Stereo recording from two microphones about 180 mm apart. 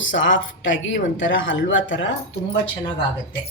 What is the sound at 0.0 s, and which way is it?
Speech, 90° left.